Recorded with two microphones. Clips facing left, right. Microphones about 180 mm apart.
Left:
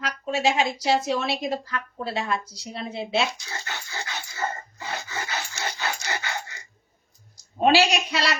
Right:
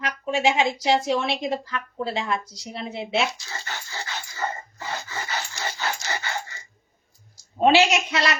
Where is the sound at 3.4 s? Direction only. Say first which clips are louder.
Even; 15° left (ahead or behind).